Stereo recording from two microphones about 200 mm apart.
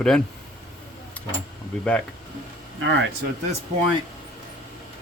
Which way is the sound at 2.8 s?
65° right (ahead or behind).